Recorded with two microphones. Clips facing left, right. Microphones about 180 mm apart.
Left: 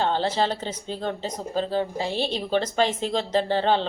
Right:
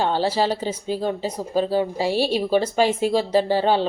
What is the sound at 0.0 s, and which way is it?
Speech, 10° right (ahead or behind).